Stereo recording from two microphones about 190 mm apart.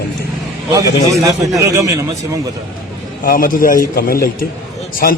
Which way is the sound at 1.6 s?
15° right (ahead or behind).